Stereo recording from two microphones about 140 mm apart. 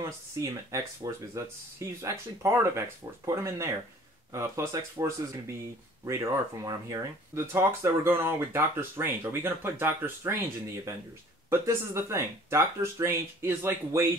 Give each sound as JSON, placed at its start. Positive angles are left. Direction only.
{"t": 0.4, "sound": "speech", "side_deg": -25}
{"t": 11.5, "sound": "speech", "side_deg": -20}